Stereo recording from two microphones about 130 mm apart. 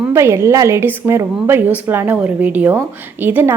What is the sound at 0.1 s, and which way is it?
A woman's voice, 20° right (ahead or behind).